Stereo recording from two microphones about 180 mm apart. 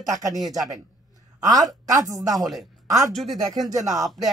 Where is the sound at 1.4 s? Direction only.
20° right (ahead or behind).